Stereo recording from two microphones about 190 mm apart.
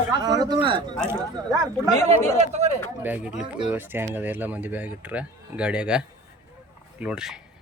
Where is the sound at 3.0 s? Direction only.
10° right (ahead or behind).